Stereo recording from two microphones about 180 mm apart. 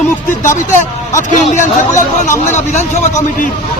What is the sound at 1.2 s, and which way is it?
Speech, 45° left (ahead or behind).